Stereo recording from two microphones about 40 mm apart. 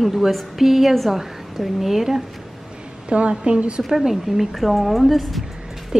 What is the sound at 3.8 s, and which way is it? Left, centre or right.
Speech, centre.